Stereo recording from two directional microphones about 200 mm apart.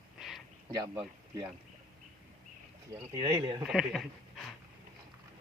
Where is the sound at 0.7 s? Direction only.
20° right (ahead or behind).